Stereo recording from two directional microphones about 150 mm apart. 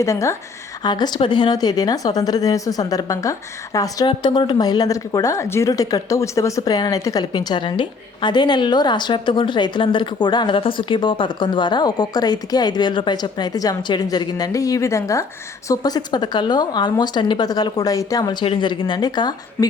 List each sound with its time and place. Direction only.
0.0 s speech: 20° left (ahead or behind)